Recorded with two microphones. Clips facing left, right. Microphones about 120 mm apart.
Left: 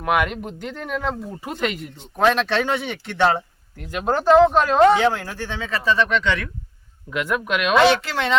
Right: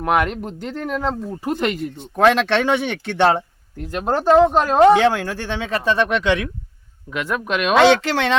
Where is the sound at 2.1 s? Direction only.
70° right (ahead or behind).